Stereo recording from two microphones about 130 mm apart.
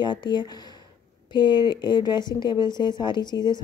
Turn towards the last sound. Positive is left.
turn(degrees=35)  # may be behind; listen again after turning